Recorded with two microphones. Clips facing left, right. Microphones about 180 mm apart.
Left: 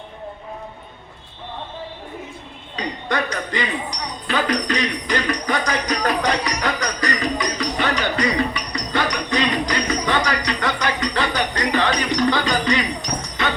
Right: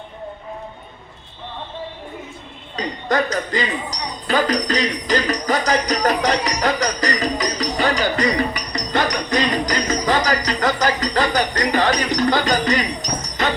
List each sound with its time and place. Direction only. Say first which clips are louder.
2.7 s speech: right 4 dB; 40° right (ahead or behind)
6.2 s music: right 2 dB; 35° right (ahead or behind)
8.1 s jingle bell: right 1 dB; 45° right (ahead or behind)